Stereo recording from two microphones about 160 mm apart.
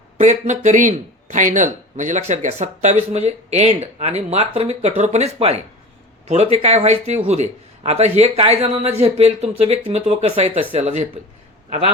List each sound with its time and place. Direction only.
0.2 s a man's voice: 50° right (ahead or behind)